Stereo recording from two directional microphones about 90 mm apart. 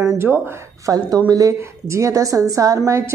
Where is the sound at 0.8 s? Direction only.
45° right (ahead or behind).